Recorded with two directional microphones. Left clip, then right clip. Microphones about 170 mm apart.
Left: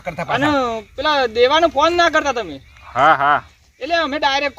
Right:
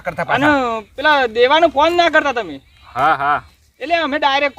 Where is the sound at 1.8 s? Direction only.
35° right (ahead or behind).